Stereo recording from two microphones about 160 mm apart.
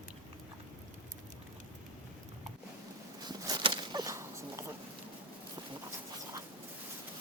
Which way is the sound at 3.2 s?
25° right (ahead or behind).